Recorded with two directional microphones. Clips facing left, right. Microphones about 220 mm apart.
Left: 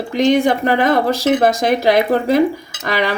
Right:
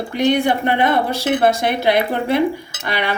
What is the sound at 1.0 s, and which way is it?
Speech, 90° left.